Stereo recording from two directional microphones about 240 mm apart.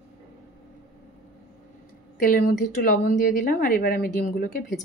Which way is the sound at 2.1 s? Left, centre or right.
Left.